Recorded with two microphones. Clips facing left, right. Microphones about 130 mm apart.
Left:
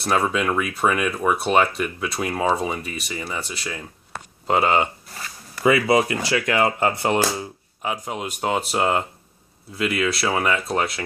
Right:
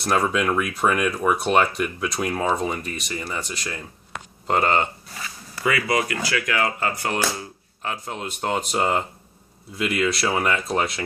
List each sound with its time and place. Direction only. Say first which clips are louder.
0.0 s speech: even; 5° left (ahead or behind)
5.6 s speech: left 5 dB; 20° left (ahead or behind); by 11.0 s centre (ahead or behind)